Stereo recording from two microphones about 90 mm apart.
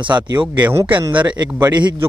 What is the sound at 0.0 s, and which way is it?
Speech, 60° right (ahead or behind).